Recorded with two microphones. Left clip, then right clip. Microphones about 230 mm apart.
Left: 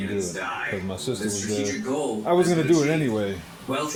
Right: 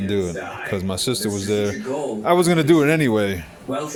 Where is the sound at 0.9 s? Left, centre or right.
Right.